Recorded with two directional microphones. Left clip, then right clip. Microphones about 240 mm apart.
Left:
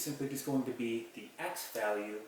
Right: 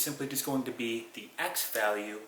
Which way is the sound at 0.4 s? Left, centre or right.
Left.